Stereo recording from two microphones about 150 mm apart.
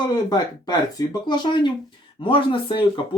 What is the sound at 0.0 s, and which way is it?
Speech, 30° left (ahead or behind).